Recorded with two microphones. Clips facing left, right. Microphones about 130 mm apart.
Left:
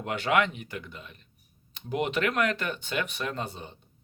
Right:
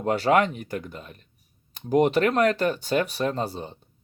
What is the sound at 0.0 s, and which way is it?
Speech, 35° right (ahead or behind).